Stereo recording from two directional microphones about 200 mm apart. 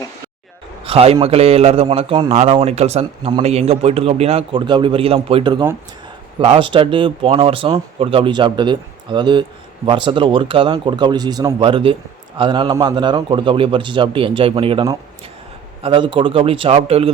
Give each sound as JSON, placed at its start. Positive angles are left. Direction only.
{"t": 0.9, "sound": "speech", "side_deg": -30}